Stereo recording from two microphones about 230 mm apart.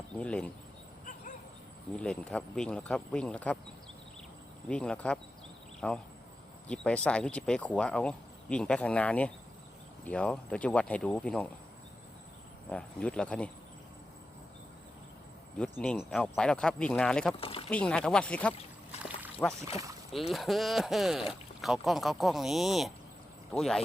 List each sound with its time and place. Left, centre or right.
0.2 s speech: centre
2.0 s speech: centre
4.7 s speech: centre
12.7 s speech: centre
15.8 s speech: centre
17.3 s speech: left
17.7 s speech: centre